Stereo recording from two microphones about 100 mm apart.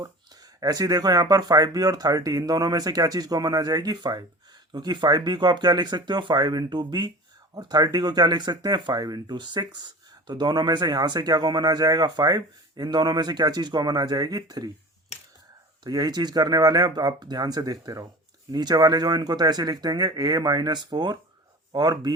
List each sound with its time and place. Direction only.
0.6 s speech: 40° right (ahead or behind)
15.1 s a sound: 90° left
15.8 s speech: 40° right (ahead or behind)